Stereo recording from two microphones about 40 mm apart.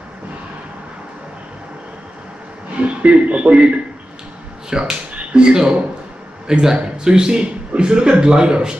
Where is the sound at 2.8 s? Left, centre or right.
Right.